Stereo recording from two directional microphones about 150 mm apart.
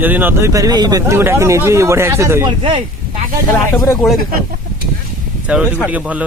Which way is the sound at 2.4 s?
35° right (ahead or behind).